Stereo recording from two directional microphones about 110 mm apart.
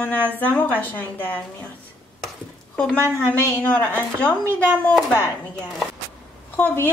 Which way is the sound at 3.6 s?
15° left (ahead or behind).